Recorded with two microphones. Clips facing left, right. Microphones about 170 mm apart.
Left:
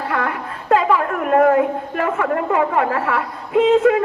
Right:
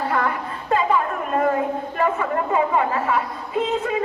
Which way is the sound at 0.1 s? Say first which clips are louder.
Even; 65° left (ahead or behind).